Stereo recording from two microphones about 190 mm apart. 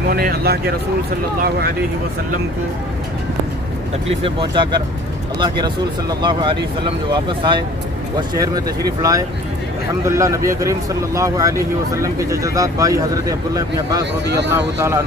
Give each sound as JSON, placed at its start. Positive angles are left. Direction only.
{"t": 0.1, "sound": "speech", "side_deg": -55}
{"t": 4.2, "sound": "speech", "side_deg": -25}
{"t": 14.2, "sound": "speech", "side_deg": -65}